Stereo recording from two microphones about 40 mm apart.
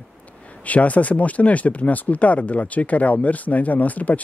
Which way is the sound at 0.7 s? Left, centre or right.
Left.